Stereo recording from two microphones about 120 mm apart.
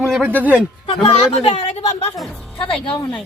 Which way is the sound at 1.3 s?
50° left (ahead or behind).